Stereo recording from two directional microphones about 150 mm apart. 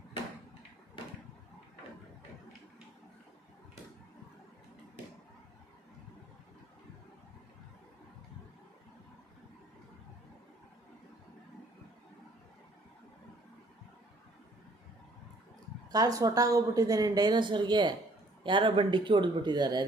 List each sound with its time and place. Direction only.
15.9 s a woman's voice: 25° right (ahead or behind)